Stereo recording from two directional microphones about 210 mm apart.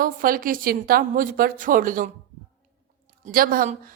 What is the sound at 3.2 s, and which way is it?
Speech, 40° right (ahead or behind).